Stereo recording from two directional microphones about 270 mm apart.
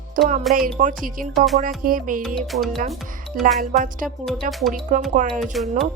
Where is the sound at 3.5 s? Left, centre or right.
Right.